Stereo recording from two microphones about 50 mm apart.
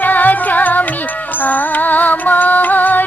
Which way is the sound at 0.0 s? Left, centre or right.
Left.